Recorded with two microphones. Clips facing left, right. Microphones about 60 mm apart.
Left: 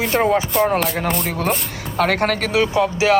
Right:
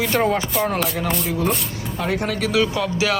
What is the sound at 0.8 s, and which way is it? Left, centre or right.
Speech, left.